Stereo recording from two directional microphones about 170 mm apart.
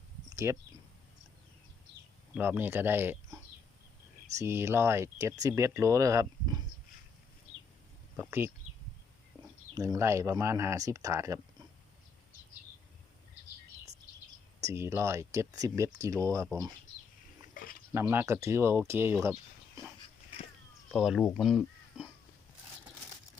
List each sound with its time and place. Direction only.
0.3 s a sound: 15° right (ahead or behind)
2.3 s speech: 10° right (ahead or behind)
4.4 s speech: 15° right (ahead or behind)
8.1 s speech: 10° right (ahead or behind)
9.7 s speech: 20° right (ahead or behind)
14.6 s speech: 15° right (ahead or behind)
17.5 s a sound: 55° left (ahead or behind)
17.9 s speech: 15° right (ahead or behind)
20.9 s speech: 5° right (ahead or behind)